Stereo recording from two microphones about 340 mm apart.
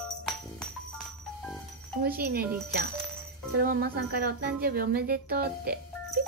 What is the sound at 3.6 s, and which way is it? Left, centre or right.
Speech, right.